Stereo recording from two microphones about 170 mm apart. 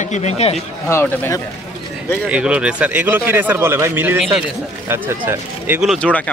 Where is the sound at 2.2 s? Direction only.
5° right (ahead or behind).